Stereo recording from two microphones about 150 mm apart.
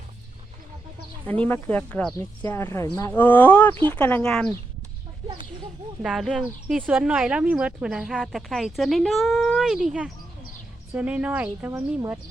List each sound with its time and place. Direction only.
1.3 s speech: 10° left (ahead or behind)
3.1 s speech: 10° left (ahead or behind)
6.0 s speech: 5° right (ahead or behind)